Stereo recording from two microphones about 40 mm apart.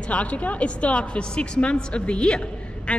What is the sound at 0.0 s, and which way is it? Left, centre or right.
A woman's voice, left.